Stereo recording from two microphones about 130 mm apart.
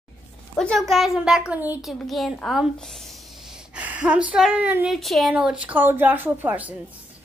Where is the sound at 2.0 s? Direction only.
Centre (ahead or behind).